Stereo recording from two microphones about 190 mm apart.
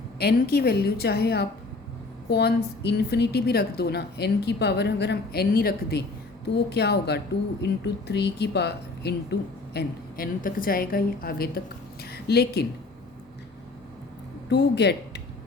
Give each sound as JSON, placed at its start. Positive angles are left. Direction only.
{"t": 0.2, "sound": "speech", "side_deg": 55}
{"t": 14.5, "sound": "speech", "side_deg": 65}